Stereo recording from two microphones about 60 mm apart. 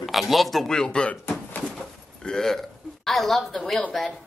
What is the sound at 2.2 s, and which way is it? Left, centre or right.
Speech, centre.